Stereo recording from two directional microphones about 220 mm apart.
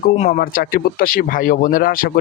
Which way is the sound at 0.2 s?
40° left (ahead or behind).